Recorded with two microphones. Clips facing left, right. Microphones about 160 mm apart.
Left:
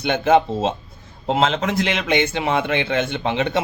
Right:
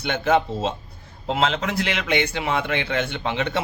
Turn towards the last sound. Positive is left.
turn(degrees=20)  # may be behind; listen again after turning